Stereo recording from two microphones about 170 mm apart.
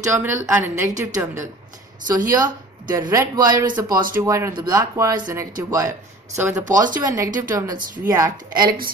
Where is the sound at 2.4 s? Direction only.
25° right (ahead or behind).